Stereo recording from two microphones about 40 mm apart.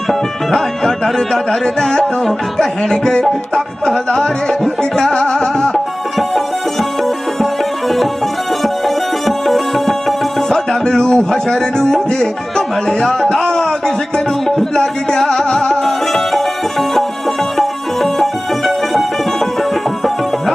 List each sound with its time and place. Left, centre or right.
0.1 s music: centre
5.7 s music: centre
9.2 s music: centre
10.5 s music: centre
11.3 s speech: centre
14.4 s music: centre
14.8 s music: centre
17.6 s music: centre